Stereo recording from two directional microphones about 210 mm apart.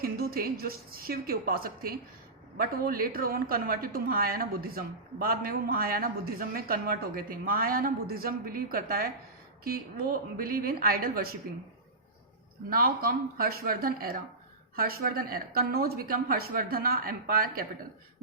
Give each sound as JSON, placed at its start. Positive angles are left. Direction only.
{"t": 0.0, "sound": "speech", "side_deg": -45}
{"t": 12.7, "sound": "speech", "side_deg": -45}